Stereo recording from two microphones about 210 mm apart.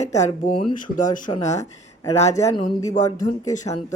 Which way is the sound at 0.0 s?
30° left (ahead or behind).